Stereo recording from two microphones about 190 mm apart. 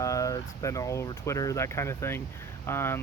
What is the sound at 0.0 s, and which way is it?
Speech, 15° left (ahead or behind).